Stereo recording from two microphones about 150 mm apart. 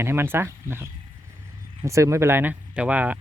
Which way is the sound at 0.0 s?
15° right (ahead or behind).